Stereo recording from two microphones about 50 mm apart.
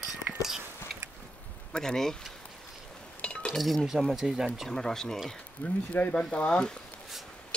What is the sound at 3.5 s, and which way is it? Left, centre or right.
Speech, centre.